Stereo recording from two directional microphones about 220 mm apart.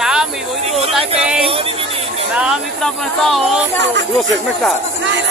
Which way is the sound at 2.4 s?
Centre (ahead or behind).